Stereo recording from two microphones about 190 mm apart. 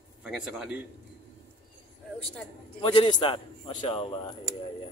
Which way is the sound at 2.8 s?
25° left (ahead or behind).